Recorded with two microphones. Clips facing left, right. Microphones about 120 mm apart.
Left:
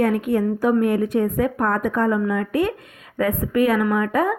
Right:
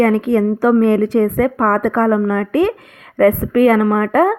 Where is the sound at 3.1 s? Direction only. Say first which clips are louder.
Right 8 dB; 75° right (ahead or behind); by 4.3 s 90° right.